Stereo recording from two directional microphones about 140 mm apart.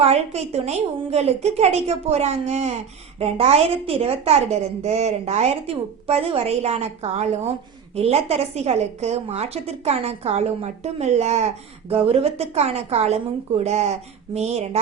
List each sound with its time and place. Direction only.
0.0 s a woman's voice: 50° right (ahead or behind)